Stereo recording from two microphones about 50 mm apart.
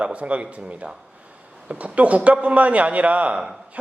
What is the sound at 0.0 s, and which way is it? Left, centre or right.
A man's voice, right.